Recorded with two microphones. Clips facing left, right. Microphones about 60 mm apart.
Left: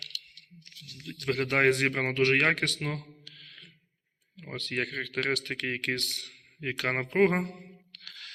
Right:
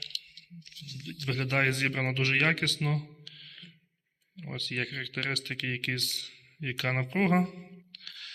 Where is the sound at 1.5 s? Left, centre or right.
Left.